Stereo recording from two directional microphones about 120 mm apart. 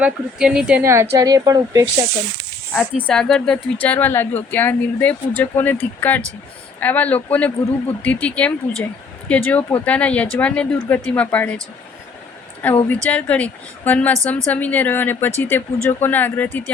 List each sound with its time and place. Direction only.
0.0 s speech: 5° right (ahead or behind)
0.8 s a woman's voice: 20° right (ahead or behind)
2.7 s speech: 5° left (ahead or behind)
12.9 s speech: 10° left (ahead or behind)